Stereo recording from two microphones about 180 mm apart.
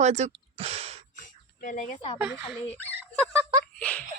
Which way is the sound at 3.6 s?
5° left (ahead or behind).